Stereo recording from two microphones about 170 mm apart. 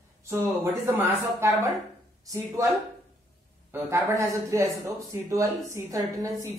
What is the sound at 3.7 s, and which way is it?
Speech, 15° right (ahead or behind).